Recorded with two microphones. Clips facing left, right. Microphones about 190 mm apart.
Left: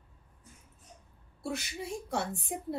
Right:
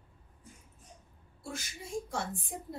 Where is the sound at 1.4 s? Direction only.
65° left (ahead or behind).